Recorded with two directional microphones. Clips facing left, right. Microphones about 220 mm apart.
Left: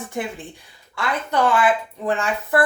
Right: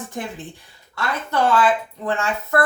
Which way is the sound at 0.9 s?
15° left (ahead or behind).